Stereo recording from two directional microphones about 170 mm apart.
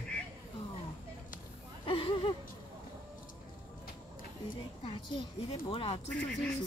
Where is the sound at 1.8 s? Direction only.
30° left (ahead or behind).